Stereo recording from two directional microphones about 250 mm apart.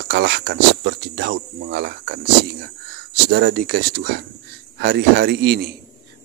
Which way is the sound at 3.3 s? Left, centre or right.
Right.